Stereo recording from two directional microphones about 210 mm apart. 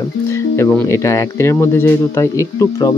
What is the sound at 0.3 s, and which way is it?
Speech, 10° left (ahead or behind).